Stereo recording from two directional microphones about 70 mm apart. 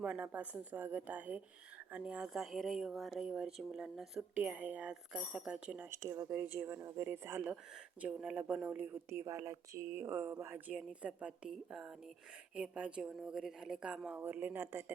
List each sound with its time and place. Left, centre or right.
0.0 s a woman's voice: right; by 3.2 s centre
3.2 s speech: centre
4.4 s speech: right
6.3 s speech: right
6.7 s speech: right
7.1 s speech: right
8.0 s a woman's voice: centre
9.0 s speech: right
11.0 s speech: centre
14.2 s speech: right